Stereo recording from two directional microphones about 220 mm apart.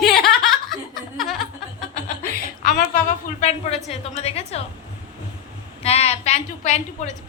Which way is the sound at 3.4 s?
30° left (ahead or behind).